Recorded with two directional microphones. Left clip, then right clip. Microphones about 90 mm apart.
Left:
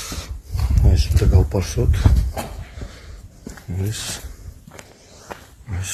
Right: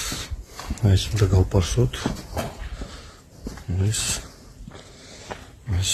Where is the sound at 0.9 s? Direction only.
Centre (ahead or behind).